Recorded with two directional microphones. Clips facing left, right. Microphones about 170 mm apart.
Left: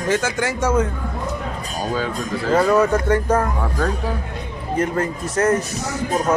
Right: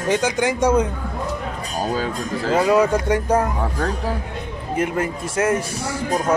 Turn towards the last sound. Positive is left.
turn(degrees=-10)  # may be behind; listen again after turning